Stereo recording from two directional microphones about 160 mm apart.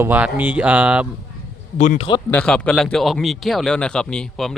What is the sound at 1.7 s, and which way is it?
Speech, 50° left (ahead or behind).